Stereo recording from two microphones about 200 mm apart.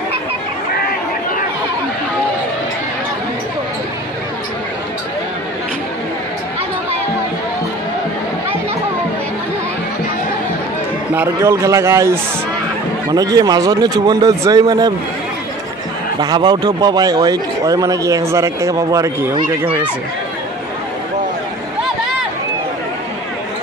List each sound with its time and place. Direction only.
11.1 s a man's voice: 15° right (ahead or behind)
16.2 s a man's voice: 20° right (ahead or behind)